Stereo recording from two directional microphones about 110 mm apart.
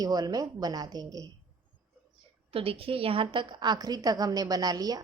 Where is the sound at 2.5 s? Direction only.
60° right (ahead or behind).